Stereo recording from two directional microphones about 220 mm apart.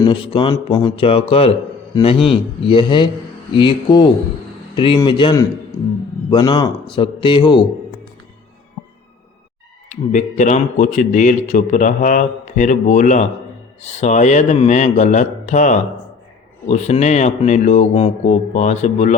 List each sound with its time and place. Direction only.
0.0 s a man's voice: 25° left (ahead or behind)
9.9 s speech: 35° left (ahead or behind)